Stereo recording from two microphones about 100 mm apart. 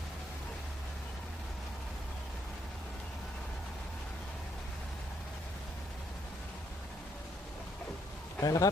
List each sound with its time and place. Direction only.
8.4 s a man's voice: 35° left (ahead or behind)